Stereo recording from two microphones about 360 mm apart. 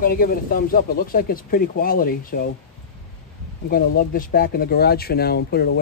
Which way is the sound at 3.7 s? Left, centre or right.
Left.